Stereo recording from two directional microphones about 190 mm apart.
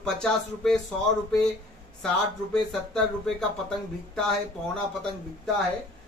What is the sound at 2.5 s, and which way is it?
Speech, 5° left (ahead or behind).